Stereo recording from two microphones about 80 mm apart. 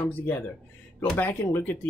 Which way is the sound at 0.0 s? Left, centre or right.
Left.